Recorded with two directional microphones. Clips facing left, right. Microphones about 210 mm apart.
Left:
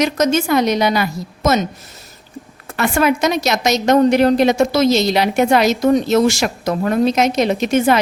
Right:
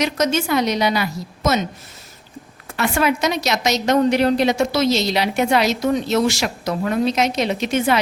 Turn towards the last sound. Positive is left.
turn(degrees=45)  # may be behind; listen again after turning